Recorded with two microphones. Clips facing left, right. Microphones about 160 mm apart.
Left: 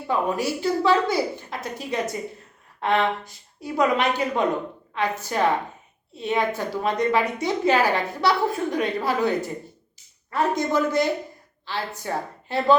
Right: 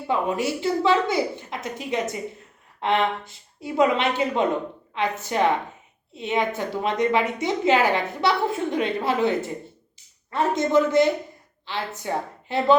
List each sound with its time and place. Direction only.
0.1 s a woman's voice: 20° right (ahead or behind)